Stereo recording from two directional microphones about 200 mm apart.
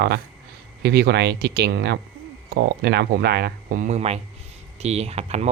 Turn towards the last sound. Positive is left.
turn(degrees=-30)  # may be behind; listen again after turning